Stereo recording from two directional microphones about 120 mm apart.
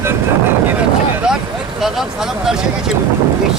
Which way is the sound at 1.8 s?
5° right (ahead or behind).